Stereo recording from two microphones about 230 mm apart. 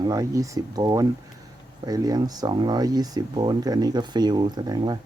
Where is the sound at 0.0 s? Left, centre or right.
Centre.